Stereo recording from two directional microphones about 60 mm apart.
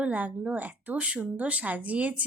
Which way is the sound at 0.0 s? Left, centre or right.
Right.